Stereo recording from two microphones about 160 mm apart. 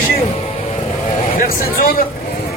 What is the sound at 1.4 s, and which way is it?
Speech, 60° left (ahead or behind).